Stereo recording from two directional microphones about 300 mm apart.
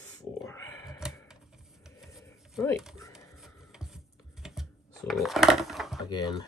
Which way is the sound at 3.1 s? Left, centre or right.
Centre.